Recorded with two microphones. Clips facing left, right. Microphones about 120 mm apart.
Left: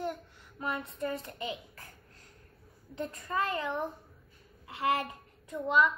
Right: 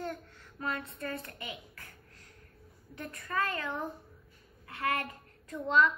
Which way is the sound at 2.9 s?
25° left (ahead or behind).